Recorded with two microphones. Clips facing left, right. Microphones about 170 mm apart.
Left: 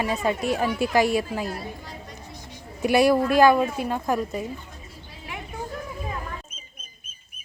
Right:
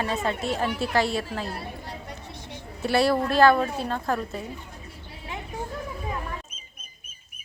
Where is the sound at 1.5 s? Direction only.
65° right (ahead or behind).